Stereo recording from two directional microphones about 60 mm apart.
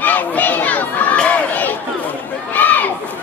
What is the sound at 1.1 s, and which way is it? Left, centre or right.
Crowd, left.